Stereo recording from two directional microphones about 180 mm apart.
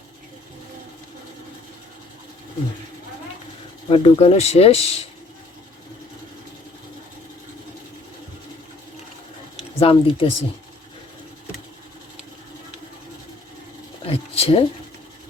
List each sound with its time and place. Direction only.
3.8 s speech: 35° left (ahead or behind)
9.7 s speech: 30° left (ahead or behind)
14.1 s a sound: 35° left (ahead or behind)